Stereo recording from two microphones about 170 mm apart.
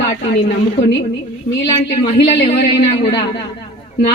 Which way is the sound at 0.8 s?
40° left (ahead or behind).